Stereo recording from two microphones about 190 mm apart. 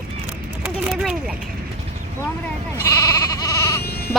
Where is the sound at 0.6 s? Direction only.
5° right (ahead or behind).